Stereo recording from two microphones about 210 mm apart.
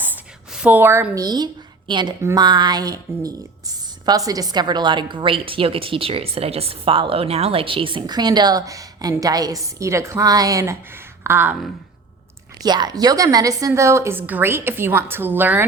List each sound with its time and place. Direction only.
0.5 s a woman's voice: 5° right (ahead or behind)
12.6 s a woman's voice: 20° right (ahead or behind)